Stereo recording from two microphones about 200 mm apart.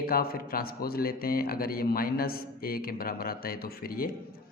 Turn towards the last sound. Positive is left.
turn(degrees=45)  # may be behind; listen again after turning